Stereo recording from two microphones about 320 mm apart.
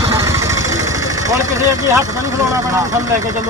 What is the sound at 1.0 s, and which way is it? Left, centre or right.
Speech, centre.